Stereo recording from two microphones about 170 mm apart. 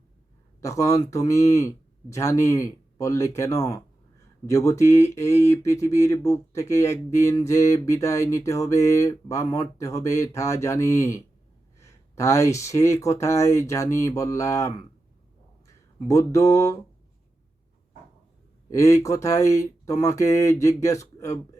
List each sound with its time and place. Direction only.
0.6 s speech: 20° left (ahead or behind)
18.7 s speech: 20° left (ahead or behind)